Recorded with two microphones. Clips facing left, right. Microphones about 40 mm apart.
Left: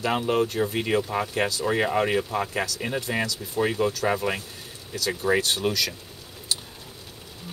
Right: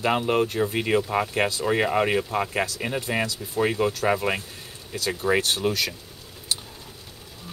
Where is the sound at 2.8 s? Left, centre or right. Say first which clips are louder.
Right 1 dB; centre.